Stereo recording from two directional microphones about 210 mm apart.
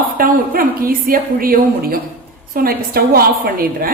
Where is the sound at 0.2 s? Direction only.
45° right (ahead or behind).